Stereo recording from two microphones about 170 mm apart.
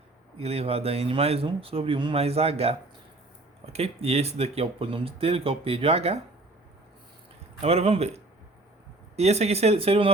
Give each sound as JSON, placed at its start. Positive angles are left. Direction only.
{"t": 0.3, "sound": "speech", "side_deg": -35}
{"t": 7.6, "sound": "speech", "side_deg": -35}